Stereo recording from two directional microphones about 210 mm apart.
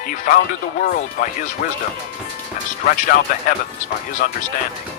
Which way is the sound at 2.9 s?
40° left (ahead or behind).